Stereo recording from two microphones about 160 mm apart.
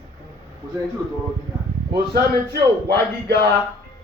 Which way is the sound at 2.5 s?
85° right.